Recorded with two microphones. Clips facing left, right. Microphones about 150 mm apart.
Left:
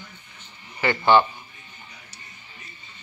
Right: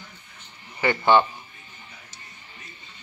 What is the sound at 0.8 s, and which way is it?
Speech, 20° right (ahead or behind).